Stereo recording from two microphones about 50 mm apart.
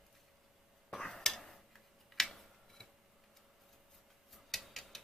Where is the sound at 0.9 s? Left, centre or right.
Centre.